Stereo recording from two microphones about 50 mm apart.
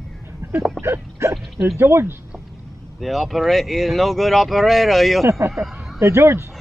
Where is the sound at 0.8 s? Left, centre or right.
Right.